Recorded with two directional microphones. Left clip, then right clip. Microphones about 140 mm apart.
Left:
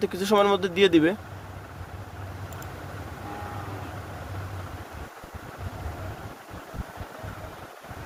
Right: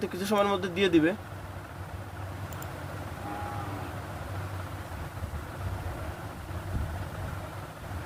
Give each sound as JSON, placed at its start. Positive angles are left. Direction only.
{"t": 0.0, "sound": "speech", "side_deg": 55}